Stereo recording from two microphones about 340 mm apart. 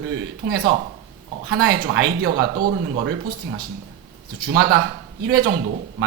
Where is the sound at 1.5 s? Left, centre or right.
Right.